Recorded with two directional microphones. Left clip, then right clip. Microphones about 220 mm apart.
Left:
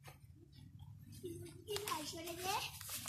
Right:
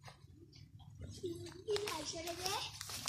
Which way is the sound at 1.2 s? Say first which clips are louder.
Right 5 dB; 30° left (ahead or behind).